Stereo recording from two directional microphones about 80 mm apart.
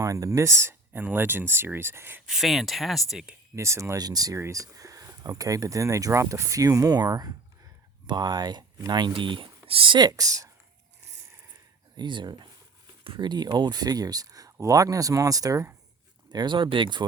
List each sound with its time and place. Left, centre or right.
0.0 s speech: right
0.9 s speech: right
2.2 s speech: centre
3.5 s speech: right
3.9 s speech: right
4.4 s speech: right
8.0 s speech: right
10.1 s speech: right
11.9 s speech: right
16.3 s speech: right